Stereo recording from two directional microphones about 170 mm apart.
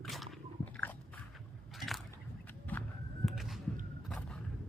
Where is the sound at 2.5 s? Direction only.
10° left (ahead or behind).